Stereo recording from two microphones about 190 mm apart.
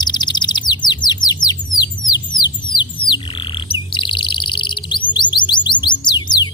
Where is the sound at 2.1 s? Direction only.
20° left (ahead or behind).